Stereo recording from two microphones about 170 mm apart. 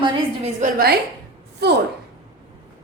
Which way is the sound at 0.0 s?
40° right (ahead or behind).